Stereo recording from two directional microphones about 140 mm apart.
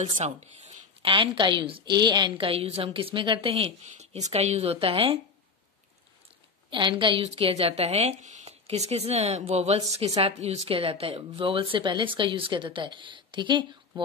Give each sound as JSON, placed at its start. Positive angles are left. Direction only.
{"t": 0.2, "sound": "a sound", "side_deg": -55}
{"t": 1.1, "sound": "a woman's voice", "side_deg": -35}
{"t": 6.7, "sound": "a woman's voice", "side_deg": -35}